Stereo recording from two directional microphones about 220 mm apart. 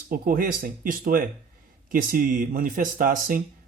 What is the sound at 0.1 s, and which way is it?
Speech, 40° right (ahead or behind).